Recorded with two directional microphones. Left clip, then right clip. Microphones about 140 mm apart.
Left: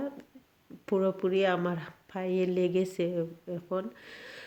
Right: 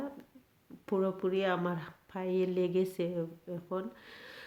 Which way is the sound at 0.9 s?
25° left (ahead or behind).